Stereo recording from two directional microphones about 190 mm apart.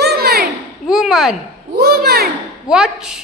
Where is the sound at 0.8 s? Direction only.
Centre (ahead or behind).